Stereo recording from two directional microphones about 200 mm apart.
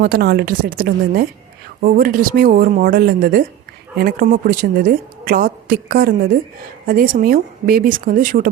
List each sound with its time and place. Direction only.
0.0 s a woman's voice: 50° right (ahead or behind)